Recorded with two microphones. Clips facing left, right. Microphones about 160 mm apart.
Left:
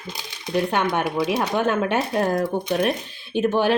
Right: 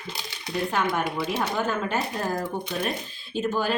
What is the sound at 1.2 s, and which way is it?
A woman's voice, 70° left (ahead or behind).